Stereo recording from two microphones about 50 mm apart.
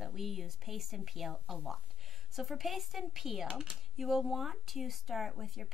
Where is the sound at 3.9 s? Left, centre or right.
Centre.